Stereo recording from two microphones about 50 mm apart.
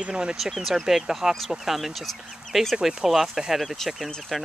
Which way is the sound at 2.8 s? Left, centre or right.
Centre.